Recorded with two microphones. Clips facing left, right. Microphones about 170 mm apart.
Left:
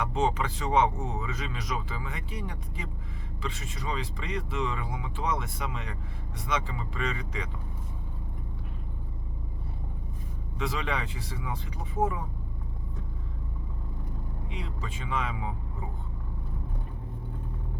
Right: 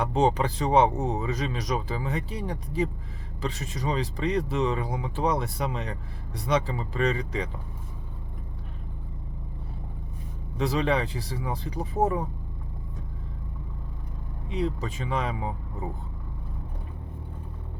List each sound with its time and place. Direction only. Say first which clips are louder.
0.0 s speech: right 5 dB; 35° right (ahead or behind)
10.6 s speech: right 7 dB; 35° right (ahead or behind)
14.5 s speech: right 12 dB; 40° right (ahead or behind)